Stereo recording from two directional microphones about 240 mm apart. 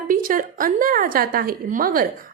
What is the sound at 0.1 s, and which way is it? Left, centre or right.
A woman's voice, right.